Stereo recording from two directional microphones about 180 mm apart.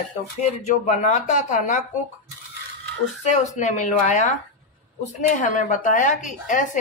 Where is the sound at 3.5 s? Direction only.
40° left (ahead or behind).